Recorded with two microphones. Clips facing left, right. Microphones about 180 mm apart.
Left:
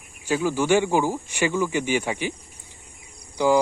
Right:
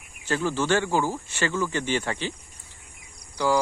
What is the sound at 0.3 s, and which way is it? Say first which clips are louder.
Speech: left 3 dB; 10° left (ahead or behind).